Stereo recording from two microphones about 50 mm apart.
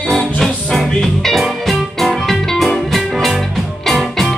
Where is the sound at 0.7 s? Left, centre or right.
Centre.